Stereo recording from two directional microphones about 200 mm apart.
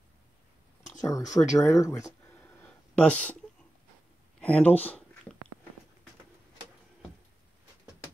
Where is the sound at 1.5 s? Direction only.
15° left (ahead or behind).